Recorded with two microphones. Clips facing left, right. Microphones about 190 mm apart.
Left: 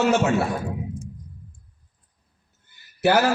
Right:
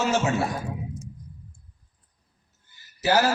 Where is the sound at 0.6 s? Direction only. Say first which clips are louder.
Left 3 dB; 55° left (ahead or behind).